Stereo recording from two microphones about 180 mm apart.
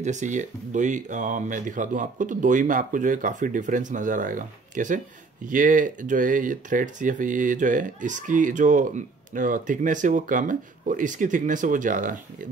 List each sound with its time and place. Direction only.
0.0 s speech: 40° right (ahead or behind)